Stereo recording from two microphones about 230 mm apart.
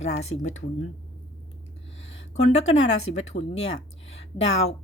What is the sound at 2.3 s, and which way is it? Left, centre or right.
Speech, left.